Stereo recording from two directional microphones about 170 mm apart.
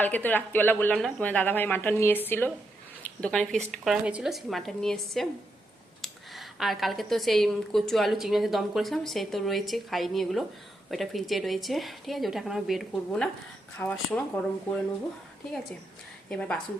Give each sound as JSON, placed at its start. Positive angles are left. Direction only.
{"t": 0.0, "sound": "a woman's voice", "side_deg": 10}
{"t": 16.3, "sound": "a woman's voice", "side_deg": 5}